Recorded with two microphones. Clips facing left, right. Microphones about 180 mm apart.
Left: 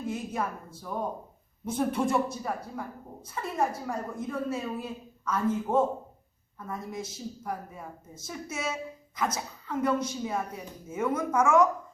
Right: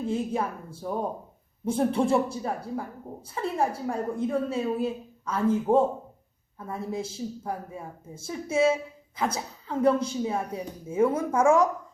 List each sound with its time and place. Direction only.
0.0 s a woman's voice: 30° right (ahead or behind)